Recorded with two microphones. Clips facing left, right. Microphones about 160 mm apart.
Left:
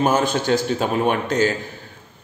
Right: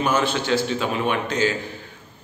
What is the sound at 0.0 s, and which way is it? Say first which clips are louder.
A man's voice: left 3 dB; 45° left (ahead or behind).